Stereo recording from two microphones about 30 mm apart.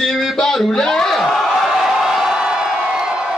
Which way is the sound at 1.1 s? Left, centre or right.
Centre.